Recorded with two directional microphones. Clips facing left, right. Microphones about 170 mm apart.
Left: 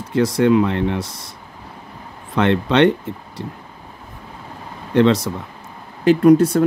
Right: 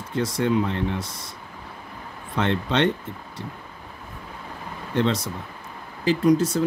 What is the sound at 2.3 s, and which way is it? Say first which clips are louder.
Speech: left 7 dB; 70° left (ahead or behind).